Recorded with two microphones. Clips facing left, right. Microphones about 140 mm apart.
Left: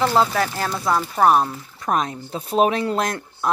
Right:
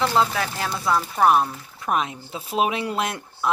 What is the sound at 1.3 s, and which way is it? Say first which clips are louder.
Speech: left 2 dB; 35° left (ahead or behind).